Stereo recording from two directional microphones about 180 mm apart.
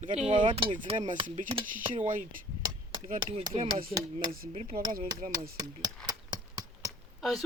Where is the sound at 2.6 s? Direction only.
25° right (ahead or behind).